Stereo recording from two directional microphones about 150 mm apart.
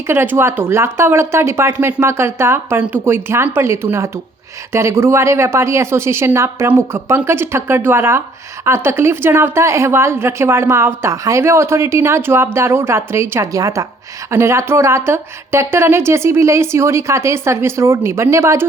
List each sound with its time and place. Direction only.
0.1 s speech: 15° right (ahead or behind)